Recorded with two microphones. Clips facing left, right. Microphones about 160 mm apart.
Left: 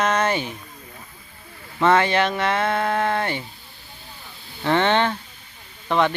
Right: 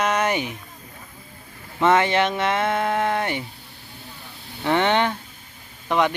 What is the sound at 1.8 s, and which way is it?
Speech, 20° right (ahead or behind).